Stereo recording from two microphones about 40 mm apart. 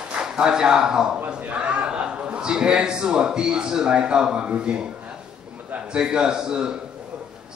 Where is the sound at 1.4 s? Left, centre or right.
Right.